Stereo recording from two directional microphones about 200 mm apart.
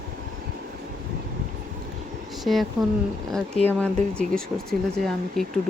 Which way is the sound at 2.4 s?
Centre (ahead or behind).